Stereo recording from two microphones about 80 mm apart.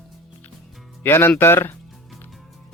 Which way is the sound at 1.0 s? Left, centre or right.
Left.